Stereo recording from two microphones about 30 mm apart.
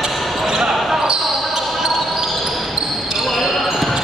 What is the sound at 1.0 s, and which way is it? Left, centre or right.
Basketball bounce, right.